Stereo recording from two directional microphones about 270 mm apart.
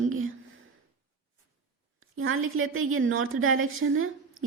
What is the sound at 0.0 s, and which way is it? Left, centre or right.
Whispering, right.